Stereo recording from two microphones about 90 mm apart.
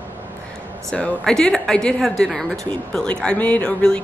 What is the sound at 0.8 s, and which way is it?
A woman's voice, 15° left (ahead or behind).